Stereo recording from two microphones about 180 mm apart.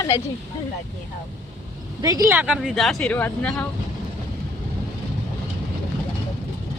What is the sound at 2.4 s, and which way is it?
Speech, 5° right (ahead or behind).